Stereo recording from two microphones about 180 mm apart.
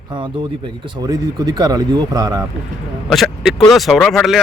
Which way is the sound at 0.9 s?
20° right (ahead or behind).